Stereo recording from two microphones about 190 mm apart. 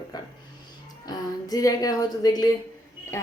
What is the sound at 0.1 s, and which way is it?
Speech, 20° left (ahead or behind).